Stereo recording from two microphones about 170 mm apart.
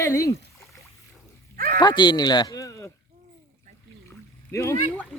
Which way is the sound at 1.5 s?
60° right (ahead or behind).